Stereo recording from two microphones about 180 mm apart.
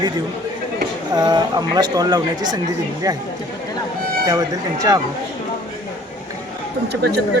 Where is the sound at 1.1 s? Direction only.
20° right (ahead or behind).